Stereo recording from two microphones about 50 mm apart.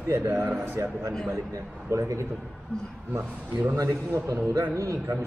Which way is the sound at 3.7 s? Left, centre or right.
Right.